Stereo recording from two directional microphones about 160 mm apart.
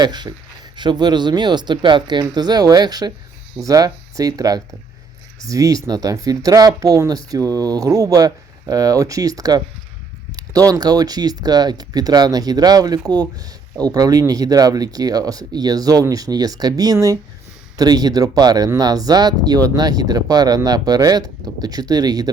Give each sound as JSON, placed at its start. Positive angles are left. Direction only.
{"t": 0.0, "sound": "speech", "side_deg": -25}